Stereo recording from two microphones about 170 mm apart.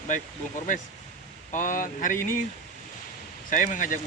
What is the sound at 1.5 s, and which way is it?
Speech, 50° left (ahead or behind).